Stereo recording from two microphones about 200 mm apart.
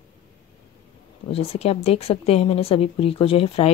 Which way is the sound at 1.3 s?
30° left (ahead or behind).